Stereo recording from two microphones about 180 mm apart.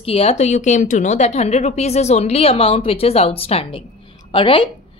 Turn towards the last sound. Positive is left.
turn(degrees=30)  # may be behind; listen again after turning